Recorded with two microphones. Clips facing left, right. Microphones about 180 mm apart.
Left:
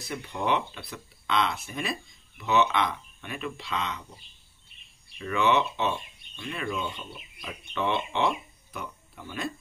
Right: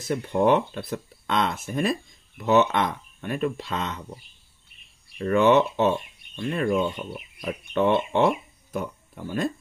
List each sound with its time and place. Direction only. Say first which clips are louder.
0.0 s speech: right 10 dB; 45° right (ahead or behind)
5.2 s speech: right 7 dB; 45° right (ahead or behind)